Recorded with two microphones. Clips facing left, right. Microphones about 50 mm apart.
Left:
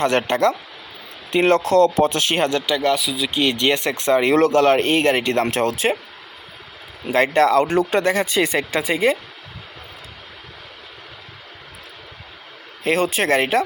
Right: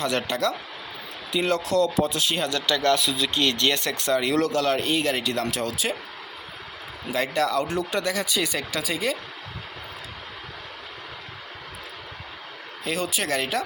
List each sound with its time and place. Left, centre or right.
0.0 s speech: left
2.6 s speech: centre
3.0 s speech: centre; by 6.0 s left
7.1 s speech: left
12.8 s speech: left